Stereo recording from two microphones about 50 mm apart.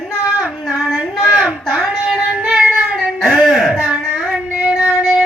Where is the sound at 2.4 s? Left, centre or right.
Right.